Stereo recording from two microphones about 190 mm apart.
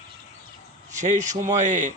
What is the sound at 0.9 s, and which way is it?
Speech, 40° right (ahead or behind).